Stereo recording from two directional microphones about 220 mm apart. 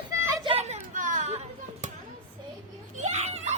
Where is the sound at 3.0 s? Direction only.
30° right (ahead or behind).